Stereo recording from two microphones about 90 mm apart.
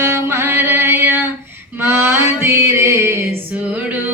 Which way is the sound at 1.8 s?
25° right (ahead or behind).